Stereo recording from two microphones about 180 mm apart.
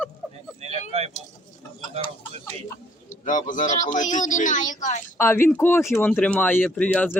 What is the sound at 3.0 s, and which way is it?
Speech, 45° left (ahead or behind).